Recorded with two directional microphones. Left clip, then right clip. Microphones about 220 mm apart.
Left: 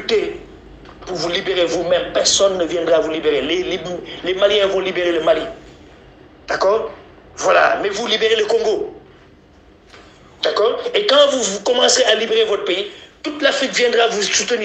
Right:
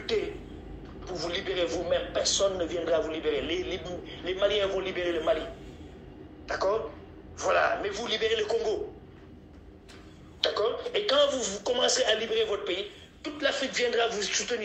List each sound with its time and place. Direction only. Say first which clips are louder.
0.0 s a sound: left 12 dB; 50° left (ahead or behind)
0.8 s a man's voice: left 12 dB; 50° left (ahead or behind)
10.4 s a man's voice: left 11 dB; 50° left (ahead or behind)